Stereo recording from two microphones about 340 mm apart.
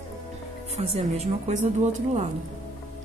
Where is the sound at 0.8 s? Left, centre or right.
Centre.